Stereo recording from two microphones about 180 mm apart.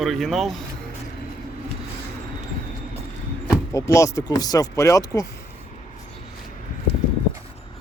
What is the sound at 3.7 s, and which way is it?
Speech, 20° left (ahead or behind).